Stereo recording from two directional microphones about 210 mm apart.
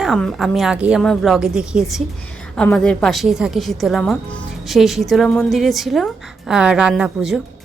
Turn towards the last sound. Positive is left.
turn(degrees=0)  # may be behind; listen again after turning